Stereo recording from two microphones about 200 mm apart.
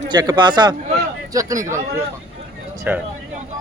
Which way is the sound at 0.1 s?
20° right (ahead or behind).